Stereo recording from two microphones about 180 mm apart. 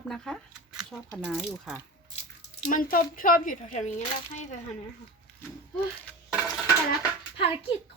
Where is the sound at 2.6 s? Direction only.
50° left (ahead or behind).